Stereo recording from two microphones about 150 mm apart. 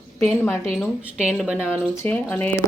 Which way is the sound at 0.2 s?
15° left (ahead or behind).